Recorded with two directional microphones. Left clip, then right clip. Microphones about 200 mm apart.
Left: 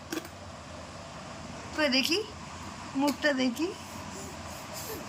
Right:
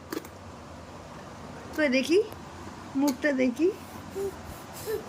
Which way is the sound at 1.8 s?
15° right (ahead or behind).